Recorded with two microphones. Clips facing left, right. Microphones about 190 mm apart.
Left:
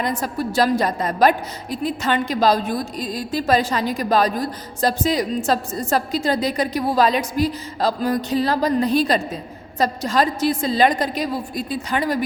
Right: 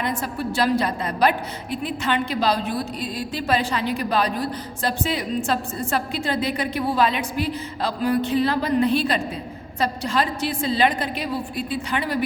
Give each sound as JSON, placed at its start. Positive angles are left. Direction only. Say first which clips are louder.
{"t": 0.0, "sound": "a woman's voice", "louder": "left 3 dB", "side_deg": 40}